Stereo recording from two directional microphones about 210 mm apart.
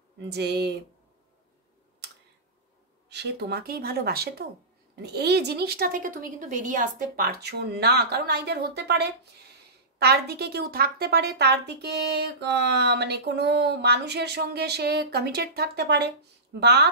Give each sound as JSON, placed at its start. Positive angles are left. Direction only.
{"t": 0.3, "sound": "a woman's voice", "side_deg": -50}
{"t": 3.1, "sound": "a woman's voice", "side_deg": -50}